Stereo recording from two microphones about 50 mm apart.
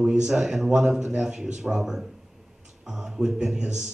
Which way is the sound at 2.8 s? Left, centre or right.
Centre.